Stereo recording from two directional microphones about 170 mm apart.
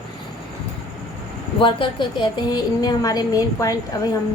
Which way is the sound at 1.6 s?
30° left (ahead or behind).